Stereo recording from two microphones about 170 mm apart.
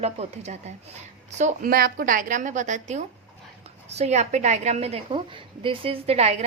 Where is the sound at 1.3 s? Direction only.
50° right (ahead or behind).